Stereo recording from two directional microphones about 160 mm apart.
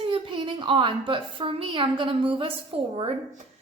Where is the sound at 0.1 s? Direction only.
30° right (ahead or behind).